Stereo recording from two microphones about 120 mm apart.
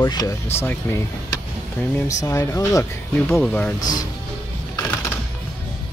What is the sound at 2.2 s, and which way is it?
Speech, 25° left (ahead or behind).